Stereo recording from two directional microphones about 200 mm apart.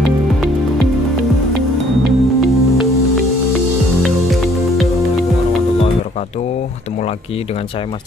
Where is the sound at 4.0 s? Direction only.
Centre (ahead or behind).